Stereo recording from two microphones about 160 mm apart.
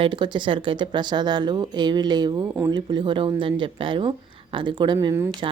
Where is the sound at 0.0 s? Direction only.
30° right (ahead or behind).